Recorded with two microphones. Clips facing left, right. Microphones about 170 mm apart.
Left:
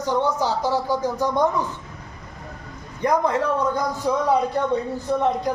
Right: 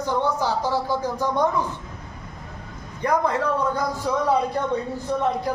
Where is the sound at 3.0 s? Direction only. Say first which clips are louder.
Left 2 dB; 15° left (ahead or behind).